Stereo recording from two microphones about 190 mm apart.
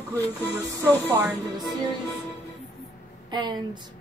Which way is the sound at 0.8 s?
10° right (ahead or behind).